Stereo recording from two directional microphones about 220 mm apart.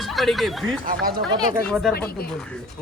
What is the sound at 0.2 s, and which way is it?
Speech, centre (ahead or behind).